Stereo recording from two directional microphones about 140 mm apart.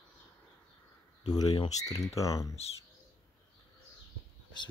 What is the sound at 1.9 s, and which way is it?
Speech, 25° left (ahead or behind).